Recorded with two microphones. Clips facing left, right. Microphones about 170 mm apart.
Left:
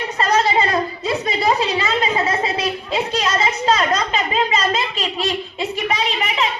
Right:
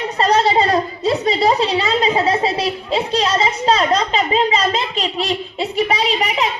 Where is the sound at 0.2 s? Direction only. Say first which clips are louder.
Right 3 dB; 35° right (ahead or behind).